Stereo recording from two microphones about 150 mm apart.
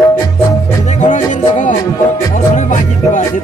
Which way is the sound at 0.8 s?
55° left (ahead or behind).